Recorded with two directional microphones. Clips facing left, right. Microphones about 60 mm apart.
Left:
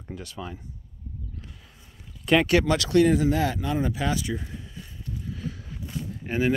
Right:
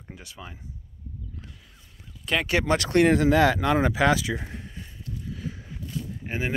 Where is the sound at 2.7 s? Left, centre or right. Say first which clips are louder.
Even; right.